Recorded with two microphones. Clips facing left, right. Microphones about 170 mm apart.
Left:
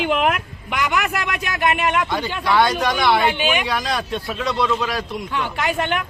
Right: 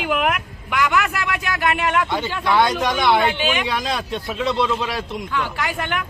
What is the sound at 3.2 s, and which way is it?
Speech, 15° left (ahead or behind).